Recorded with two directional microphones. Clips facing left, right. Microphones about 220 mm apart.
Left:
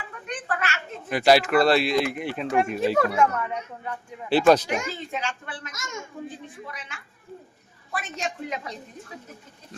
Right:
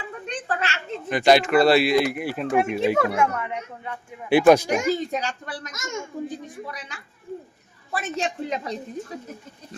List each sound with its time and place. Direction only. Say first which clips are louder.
0.1 s a sound: right 1 dB; 25° right (ahead or behind)
1.1 s speech: right 1 dB; 5° left (ahead or behind); by 4.6 s 15° right (ahead or behind)
4.9 s a child's voice: right 8 dB; 40° right (ahead or behind)
8.1 s a child's voice: right 5 dB; 30° right (ahead or behind)